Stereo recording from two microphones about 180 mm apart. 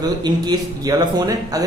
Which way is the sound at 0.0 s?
20° right (ahead or behind).